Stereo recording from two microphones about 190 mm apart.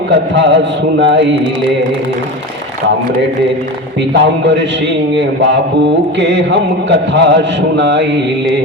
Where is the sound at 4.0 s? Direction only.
70° right (ahead or behind).